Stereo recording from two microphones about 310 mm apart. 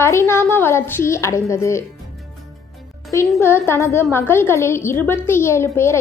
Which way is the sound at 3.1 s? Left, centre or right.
Centre.